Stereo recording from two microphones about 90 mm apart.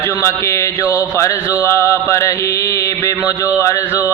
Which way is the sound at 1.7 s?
35° left (ahead or behind).